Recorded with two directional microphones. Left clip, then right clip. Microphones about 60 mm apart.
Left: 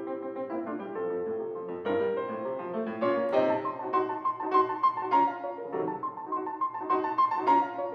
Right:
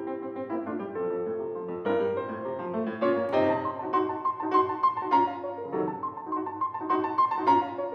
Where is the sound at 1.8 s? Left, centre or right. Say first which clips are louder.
Right 1 dB; centre.